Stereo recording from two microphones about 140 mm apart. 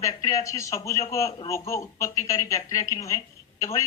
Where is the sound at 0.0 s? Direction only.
25° left (ahead or behind).